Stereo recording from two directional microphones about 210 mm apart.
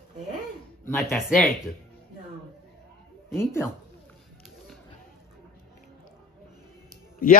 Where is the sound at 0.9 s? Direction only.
Centre (ahead or behind).